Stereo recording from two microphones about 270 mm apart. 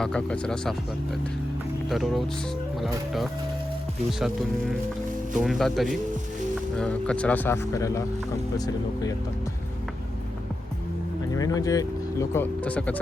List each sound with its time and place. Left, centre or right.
0.0 s speech: centre
1.9 s speech: centre
5.4 s speech: centre
11.3 s speech: centre